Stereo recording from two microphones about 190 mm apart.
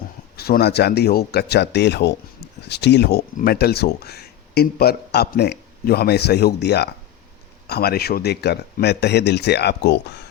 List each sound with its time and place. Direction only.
0.3 s speech: 55° left (ahead or behind)